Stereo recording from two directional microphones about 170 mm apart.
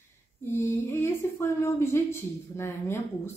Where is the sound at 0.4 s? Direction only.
15° left (ahead or behind).